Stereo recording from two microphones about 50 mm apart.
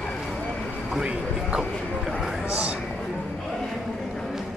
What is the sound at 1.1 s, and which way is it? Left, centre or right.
Speech, right.